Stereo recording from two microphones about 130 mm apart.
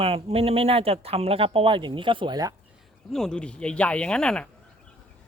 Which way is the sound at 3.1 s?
5° left (ahead or behind).